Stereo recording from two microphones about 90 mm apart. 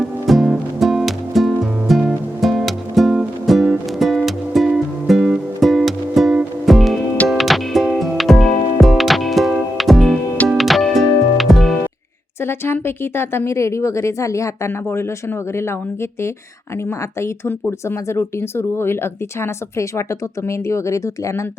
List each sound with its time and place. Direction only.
0.0 s music: centre (ahead or behind)
12.4 s speech: 25° left (ahead or behind)